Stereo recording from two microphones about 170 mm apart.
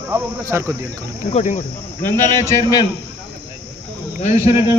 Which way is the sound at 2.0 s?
15° left (ahead or behind).